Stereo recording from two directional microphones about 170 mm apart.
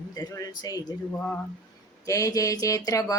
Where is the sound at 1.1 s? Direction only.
10° left (ahead or behind).